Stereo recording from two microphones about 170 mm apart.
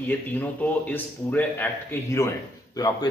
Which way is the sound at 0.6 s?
10° left (ahead or behind).